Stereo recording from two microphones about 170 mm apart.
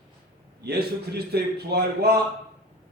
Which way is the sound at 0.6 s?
70° right (ahead or behind).